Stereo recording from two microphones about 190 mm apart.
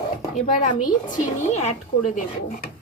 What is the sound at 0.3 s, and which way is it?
Speech, 40° left (ahead or behind).